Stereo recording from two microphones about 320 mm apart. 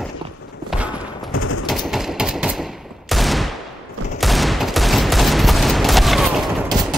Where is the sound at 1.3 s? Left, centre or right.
Left.